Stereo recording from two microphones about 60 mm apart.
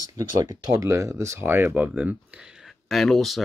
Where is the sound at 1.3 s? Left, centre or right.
Right.